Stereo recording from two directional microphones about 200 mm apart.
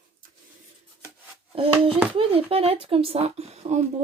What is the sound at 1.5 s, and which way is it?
Speech, 25° right (ahead or behind).